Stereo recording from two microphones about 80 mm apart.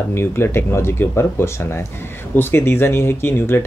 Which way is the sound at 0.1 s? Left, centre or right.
Left.